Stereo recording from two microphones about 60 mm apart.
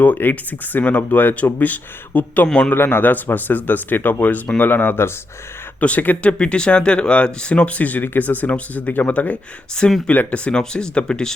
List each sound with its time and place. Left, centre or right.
0.0 s speech: left
5.8 s speech: left